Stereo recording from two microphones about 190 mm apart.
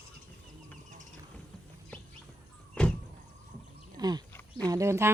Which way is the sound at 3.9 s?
20° right (ahead or behind).